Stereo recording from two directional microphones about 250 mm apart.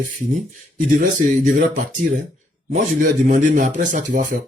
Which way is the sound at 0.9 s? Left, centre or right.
Right.